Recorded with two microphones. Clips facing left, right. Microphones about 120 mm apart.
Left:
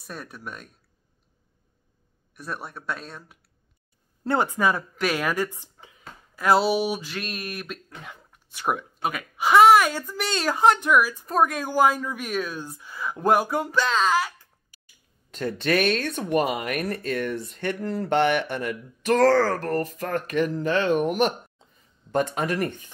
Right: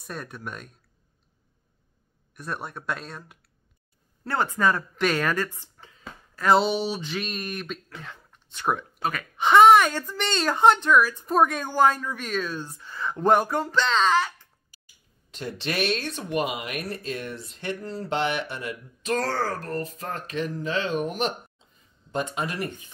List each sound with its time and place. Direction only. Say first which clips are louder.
0.0 s speech: right 2 dB; 5° left (ahead or behind)
2.3 s speech: right 1 dB; 5° left (ahead or behind)
4.2 s speech: left 2 dB; 20° left (ahead or behind)
15.3 s speech: left 6 dB; 50° left (ahead or behind)
19.1 s speech: left 8 dB; 80° left; by 22.8 s 60° left (ahead or behind)